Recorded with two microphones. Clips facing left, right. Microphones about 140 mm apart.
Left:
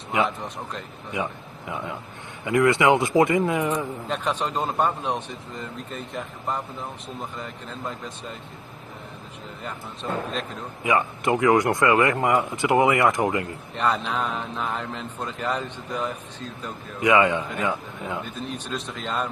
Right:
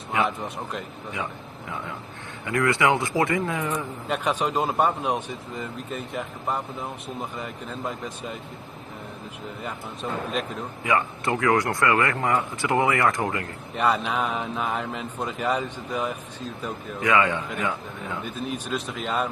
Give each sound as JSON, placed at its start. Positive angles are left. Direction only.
{"t": 1.1, "sound": "speech", "side_deg": 15}
{"t": 4.1, "sound": "a man's voice", "side_deg": -10}
{"t": 10.8, "sound": "speech", "side_deg": 20}
{"t": 13.7, "sound": "a man's voice", "side_deg": -10}
{"t": 17.0, "sound": "speech", "side_deg": 20}
{"t": 18.5, "sound": "a man's voice", "side_deg": -5}